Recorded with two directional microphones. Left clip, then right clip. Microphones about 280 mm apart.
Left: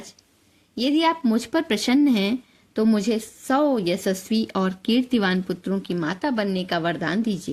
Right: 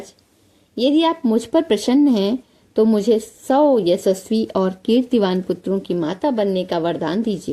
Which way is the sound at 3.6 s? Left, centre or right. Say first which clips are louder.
Right 7 dB; left.